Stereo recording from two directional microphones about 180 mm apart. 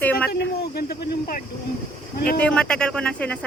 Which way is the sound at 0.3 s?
65° left (ahead or behind).